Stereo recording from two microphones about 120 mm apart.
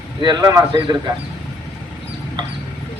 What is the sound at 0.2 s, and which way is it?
Speech, 35° right (ahead or behind).